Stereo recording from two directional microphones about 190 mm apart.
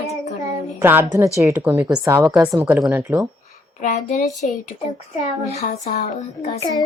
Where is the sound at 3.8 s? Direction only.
40° left (ahead or behind).